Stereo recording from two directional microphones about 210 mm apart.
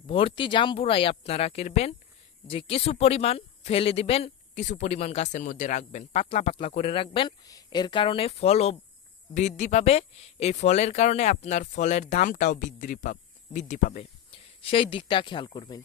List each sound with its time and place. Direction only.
0.1 s speech: 25° left (ahead or behind)